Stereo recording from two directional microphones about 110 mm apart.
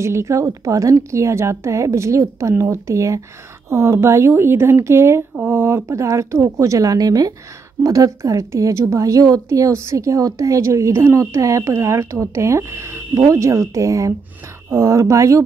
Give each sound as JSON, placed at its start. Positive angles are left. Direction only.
{"t": 0.0, "sound": "speech", "side_deg": -25}